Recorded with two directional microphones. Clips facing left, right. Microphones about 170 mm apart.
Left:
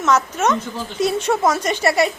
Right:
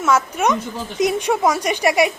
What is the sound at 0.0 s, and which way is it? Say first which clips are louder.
A woman's voice: even; 10° right (ahead or behind).